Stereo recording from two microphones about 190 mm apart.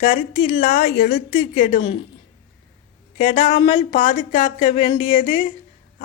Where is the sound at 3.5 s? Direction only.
25° left (ahead or behind).